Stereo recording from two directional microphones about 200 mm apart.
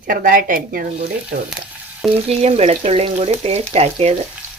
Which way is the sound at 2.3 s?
35° right (ahead or behind).